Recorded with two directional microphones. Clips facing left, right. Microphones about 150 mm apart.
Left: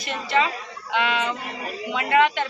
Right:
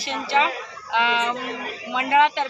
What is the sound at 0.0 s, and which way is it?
Speech, 25° right (ahead or behind).